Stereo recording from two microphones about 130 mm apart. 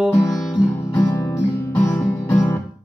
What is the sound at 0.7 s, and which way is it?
Music, 20° left (ahead or behind).